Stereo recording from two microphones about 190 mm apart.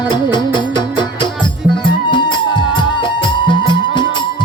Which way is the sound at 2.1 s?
25° left (ahead or behind).